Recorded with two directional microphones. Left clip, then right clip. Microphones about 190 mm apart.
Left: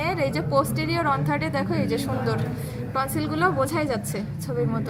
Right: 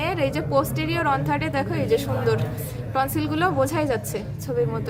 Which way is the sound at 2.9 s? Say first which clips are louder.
Right 2 dB; 35° right (ahead or behind).